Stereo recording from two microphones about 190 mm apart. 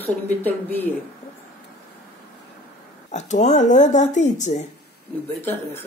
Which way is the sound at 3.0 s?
40° left (ahead or behind).